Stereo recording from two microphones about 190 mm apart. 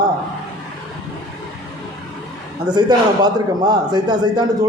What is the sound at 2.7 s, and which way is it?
A man's voice, 20° right (ahead or behind).